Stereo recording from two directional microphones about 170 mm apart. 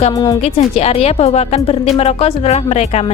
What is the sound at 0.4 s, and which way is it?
A woman's voice, 35° left (ahead or behind).